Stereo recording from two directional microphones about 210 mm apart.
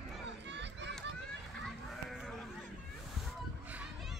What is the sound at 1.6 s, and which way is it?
Sheep, centre (ahead or behind).